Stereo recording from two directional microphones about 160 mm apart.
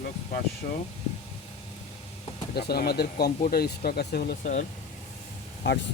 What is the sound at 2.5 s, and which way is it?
Speech, 85° left.